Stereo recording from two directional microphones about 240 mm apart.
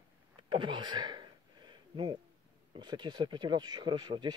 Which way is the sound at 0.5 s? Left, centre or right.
Centre.